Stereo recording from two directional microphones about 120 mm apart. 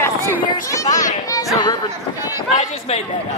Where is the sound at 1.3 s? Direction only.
30° left (ahead or behind).